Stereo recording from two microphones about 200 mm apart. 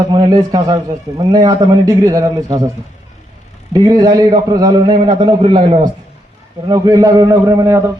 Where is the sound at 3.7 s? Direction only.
20° right (ahead or behind).